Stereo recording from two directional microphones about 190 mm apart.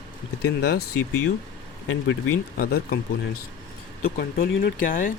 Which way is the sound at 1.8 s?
90° left.